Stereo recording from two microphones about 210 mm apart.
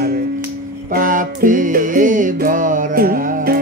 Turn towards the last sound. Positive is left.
turn(degrees=-40)  # may be behind; listen again after turning